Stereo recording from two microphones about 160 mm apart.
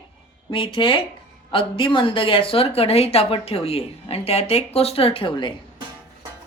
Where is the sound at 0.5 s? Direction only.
30° left (ahead or behind).